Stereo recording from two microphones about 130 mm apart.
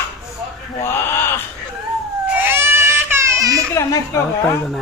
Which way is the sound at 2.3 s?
15° right (ahead or behind).